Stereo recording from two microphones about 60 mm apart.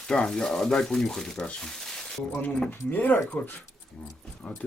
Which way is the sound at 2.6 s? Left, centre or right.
Left.